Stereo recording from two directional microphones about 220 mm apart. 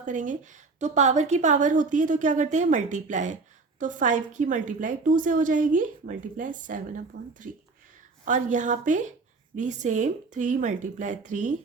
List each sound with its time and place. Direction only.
0.0 s a woman's voice: 35° right (ahead or behind)